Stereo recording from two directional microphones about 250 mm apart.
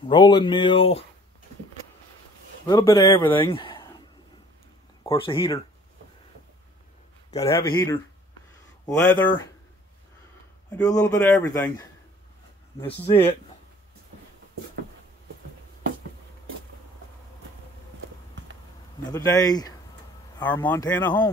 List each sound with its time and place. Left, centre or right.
0.1 s speech: centre
2.6 s speech: centre
5.0 s speech: left
7.3 s speech: centre
10.7 s speech: centre
11.0 s speech: centre
12.8 s speech: left
19.1 s speech: centre